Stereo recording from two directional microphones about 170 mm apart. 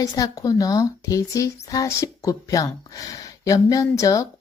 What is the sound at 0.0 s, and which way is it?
Speech, 20° left (ahead or behind).